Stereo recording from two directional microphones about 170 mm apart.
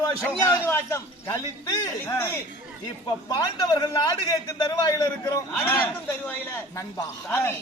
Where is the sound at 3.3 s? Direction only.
25° left (ahead or behind).